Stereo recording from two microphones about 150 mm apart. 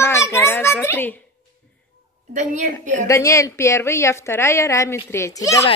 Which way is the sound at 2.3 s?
55° right (ahead or behind).